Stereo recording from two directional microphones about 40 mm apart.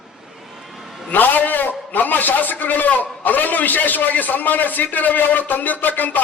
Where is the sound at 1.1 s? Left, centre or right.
Left.